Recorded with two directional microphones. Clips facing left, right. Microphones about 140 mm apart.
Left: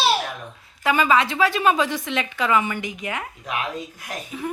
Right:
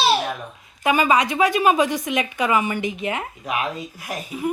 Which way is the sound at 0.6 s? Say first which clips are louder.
Right 1 dB; 20° right (ahead or behind).